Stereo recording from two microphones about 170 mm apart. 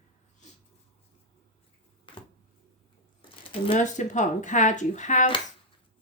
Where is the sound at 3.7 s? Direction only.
45° left (ahead or behind).